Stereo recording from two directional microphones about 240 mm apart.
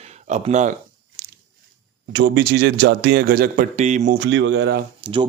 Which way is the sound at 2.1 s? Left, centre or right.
Right.